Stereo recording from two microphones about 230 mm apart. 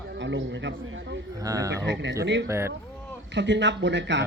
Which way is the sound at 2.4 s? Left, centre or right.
Centre.